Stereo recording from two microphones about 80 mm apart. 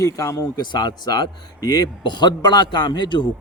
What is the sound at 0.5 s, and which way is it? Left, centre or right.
A man's voice, left.